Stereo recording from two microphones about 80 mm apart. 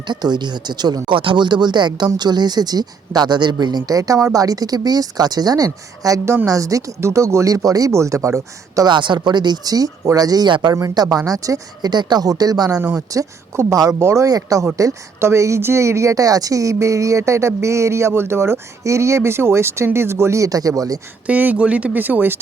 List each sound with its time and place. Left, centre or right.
0.1 s speech: right
6.2 s a woman's voice: right
8.9 s speech: right
10.5 s speech: right
10.8 s speech: right
13.1 s a woman's voice: right
21.2 s speech: centre